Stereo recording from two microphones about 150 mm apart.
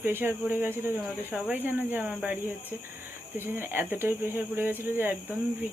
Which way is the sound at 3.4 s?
15° right (ahead or behind).